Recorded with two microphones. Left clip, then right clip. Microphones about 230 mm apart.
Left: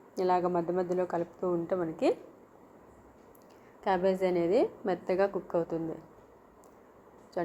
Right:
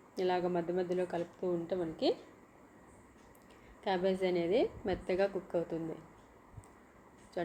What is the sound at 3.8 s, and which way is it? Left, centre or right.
Speech, centre.